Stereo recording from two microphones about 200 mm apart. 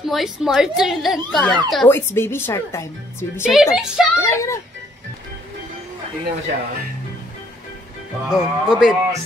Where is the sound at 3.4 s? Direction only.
5° right (ahead or behind).